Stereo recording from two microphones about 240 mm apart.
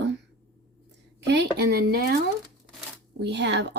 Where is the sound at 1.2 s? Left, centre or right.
Right.